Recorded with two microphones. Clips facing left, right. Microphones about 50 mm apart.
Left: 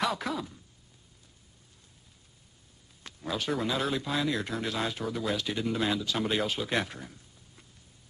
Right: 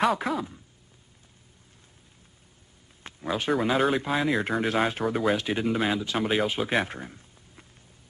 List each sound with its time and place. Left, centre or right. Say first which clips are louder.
0.1 s speech: right 6 dB; centre
3.0 s a sound: right 4 dB; right
3.9 s a man's voice: right 5 dB; right